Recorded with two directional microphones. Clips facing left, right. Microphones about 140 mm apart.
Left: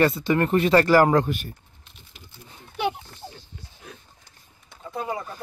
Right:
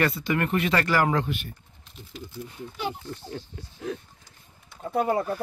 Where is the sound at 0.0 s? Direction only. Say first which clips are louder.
Left 4 dB; 30° left (ahead or behind); by 1.5 s 45° left (ahead or behind).